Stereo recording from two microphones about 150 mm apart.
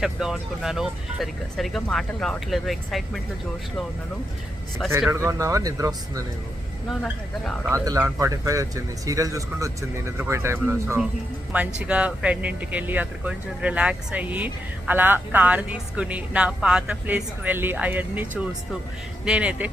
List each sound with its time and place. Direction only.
0.0 s speech: 5° right (ahead or behind)
5.1 s speech: 20° right (ahead or behind)
7.7 s speech: 20° right (ahead or behind)